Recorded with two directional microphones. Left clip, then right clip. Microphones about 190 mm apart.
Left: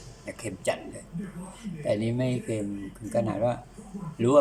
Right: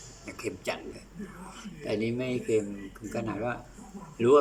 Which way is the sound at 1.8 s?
15° left (ahead or behind).